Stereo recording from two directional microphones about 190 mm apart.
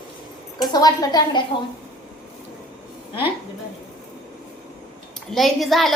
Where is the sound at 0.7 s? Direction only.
20° left (ahead or behind).